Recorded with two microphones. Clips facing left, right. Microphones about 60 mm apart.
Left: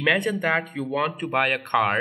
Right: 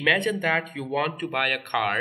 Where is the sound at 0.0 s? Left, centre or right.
Centre.